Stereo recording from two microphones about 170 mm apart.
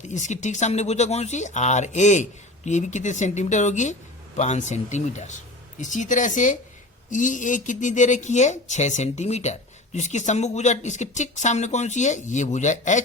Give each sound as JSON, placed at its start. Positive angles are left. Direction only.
{"t": 0.0, "sound": "speech", "side_deg": 45}